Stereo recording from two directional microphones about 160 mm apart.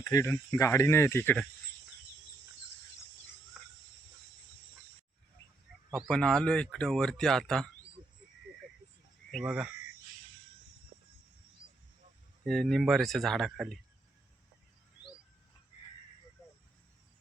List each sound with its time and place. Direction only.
0.0 s speech: 20° left (ahead or behind)
3.6 s cricket: 5° right (ahead or behind)
5.9 s speech: 5° left (ahead or behind)
9.3 s speech: 5° right (ahead or behind)
12.5 s speech: 5° left (ahead or behind)